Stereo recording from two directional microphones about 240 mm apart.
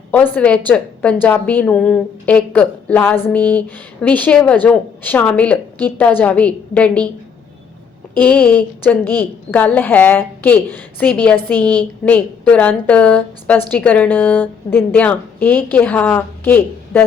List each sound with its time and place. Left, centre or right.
0.1 s a woman's voice: centre
8.1 s a woman's voice: centre